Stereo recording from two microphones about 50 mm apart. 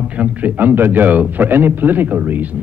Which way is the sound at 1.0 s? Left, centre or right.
Right.